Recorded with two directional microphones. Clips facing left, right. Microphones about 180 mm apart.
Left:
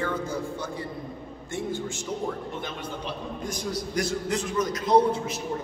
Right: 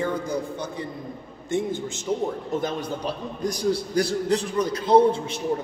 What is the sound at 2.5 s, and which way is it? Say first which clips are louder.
A man's voice: right 7 dB; 40° right (ahead or behind).